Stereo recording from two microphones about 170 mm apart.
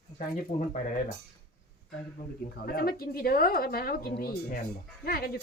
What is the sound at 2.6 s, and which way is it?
Speech, 60° left (ahead or behind).